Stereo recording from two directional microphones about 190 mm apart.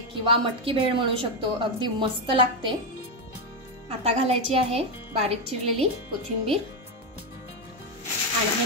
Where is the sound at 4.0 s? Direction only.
35° right (ahead or behind).